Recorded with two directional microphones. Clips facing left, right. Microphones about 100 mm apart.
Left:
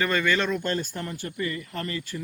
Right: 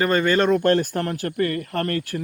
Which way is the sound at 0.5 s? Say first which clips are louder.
Right 10 dB; 65° right (ahead or behind).